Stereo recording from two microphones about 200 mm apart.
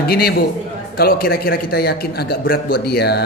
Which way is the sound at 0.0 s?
50° left (ahead or behind).